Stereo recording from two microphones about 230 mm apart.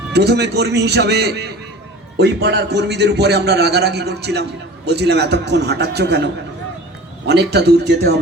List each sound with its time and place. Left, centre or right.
0.1 s a man's voice: right
7.3 s a man's voice: right